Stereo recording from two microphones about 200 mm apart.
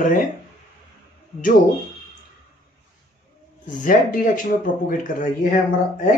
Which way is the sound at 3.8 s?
40° left (ahead or behind).